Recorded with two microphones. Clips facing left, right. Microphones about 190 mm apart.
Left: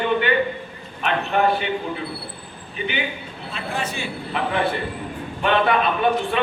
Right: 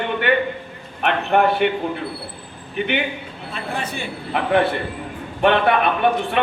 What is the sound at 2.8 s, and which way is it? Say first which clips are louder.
A man's voice: right 4 dB; 60° right (ahead or behind).